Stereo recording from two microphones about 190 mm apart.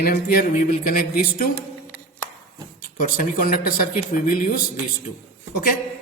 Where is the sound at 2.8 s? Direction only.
50° left (ahead or behind).